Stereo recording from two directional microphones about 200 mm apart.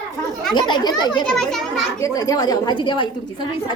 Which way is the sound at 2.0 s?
20° left (ahead or behind).